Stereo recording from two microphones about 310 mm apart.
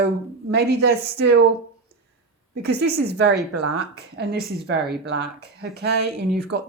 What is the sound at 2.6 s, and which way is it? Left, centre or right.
Speech, right.